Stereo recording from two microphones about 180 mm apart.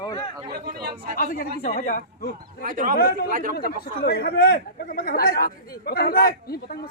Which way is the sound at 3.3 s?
50° right (ahead or behind).